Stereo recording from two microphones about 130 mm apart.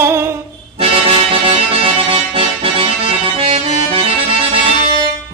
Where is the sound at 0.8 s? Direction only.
45° right (ahead or behind).